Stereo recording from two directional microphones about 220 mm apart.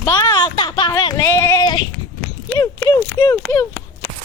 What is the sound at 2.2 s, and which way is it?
Walk, 5° left (ahead or behind).